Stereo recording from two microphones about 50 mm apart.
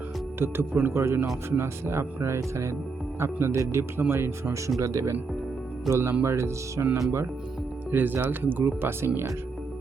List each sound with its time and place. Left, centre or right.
0.3 s speech: right
3.2 s speech: right
3.5 s speech: right
4.8 s speech: right
5.9 s speech: right
7.9 s speech: right